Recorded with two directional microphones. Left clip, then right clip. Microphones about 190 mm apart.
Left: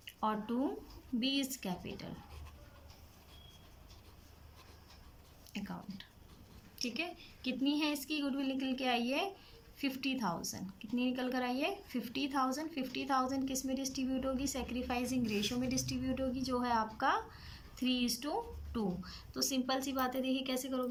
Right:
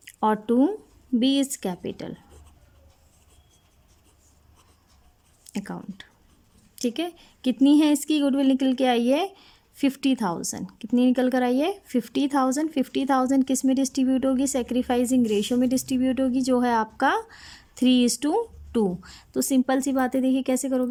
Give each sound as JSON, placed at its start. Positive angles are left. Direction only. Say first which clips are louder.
{"t": 0.0, "sound": "speech", "louder": "right 13 dB", "side_deg": -50}
{"t": 5.5, "sound": "speech", "louder": "right 10 dB", "side_deg": -50}